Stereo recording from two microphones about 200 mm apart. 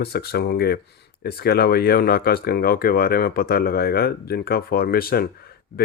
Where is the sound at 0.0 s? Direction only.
55° left (ahead or behind).